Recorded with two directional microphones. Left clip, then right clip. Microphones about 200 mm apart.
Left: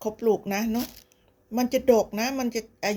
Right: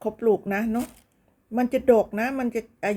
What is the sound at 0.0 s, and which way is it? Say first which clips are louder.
Speech: right 2 dB; centre (ahead or behind).